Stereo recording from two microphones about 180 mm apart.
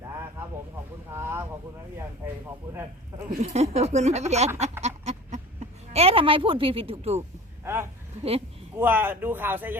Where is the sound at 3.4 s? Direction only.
35° right (ahead or behind).